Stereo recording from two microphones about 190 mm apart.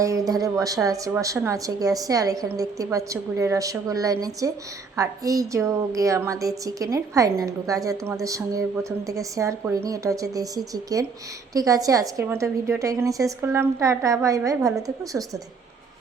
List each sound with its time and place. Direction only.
0.0 s a woman's voice: 20° right (ahead or behind)